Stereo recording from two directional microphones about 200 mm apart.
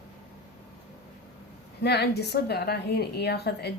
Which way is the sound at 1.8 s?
55° left (ahead or behind).